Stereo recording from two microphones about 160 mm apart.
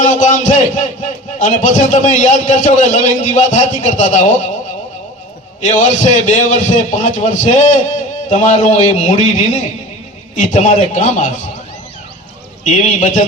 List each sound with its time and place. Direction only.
0.0 s a man's voice: 50° left (ahead or behind)
5.6 s a man's voice: 50° left (ahead or behind)
12.7 s a man's voice: 50° left (ahead or behind)